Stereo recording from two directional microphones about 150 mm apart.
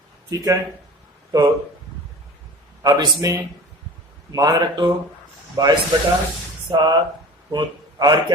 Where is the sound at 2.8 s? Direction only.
25° right (ahead or behind).